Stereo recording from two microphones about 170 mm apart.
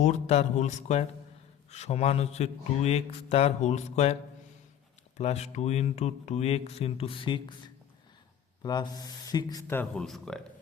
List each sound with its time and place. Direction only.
0.0 s speech: 45° left (ahead or behind); by 7.5 s 30° left (ahead or behind)
8.6 s speech: 25° left (ahead or behind); by 10.4 s 5° left (ahead or behind)